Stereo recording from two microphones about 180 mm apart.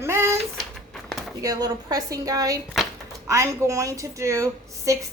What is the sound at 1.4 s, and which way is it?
A woman's voice, 20° right (ahead or behind).